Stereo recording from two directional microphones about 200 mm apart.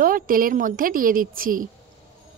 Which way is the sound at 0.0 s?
45° right (ahead or behind).